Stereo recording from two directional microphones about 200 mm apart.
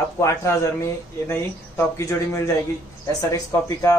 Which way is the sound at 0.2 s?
15° left (ahead or behind).